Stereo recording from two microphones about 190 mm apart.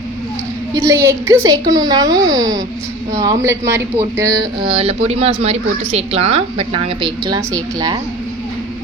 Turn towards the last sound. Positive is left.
turn(degrees=-20)  # may be behind; listen again after turning